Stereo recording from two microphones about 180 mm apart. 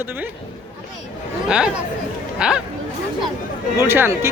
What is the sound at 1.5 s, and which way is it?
Speech, 5° right (ahead or behind).